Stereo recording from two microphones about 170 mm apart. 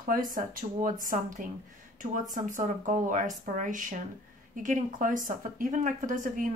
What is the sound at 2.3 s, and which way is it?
A woman's voice, 50° right (ahead or behind).